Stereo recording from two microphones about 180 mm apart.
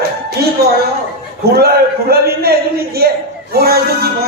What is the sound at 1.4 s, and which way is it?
A man's voice, 60° right (ahead or behind).